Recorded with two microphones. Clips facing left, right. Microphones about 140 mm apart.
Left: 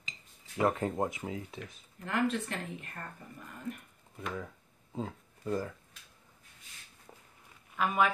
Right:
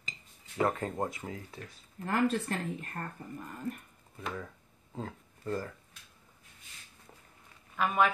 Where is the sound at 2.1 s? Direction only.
40° right (ahead or behind).